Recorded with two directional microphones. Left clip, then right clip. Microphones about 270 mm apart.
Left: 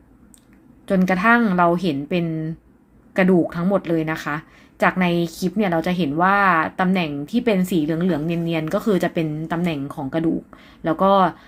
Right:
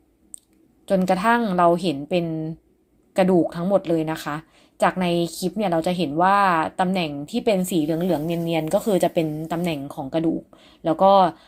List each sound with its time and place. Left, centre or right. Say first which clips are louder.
0.9 s a woman's voice: left 2 dB; centre